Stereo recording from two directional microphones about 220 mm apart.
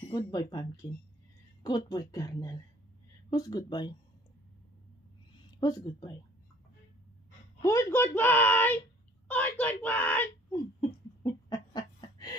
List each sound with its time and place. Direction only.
0.3 s speech: 20° left (ahead or behind)
5.6 s speech: 20° left (ahead or behind)
7.6 s speech: 10° left (ahead or behind)
10.8 s a sound: 20° left (ahead or behind)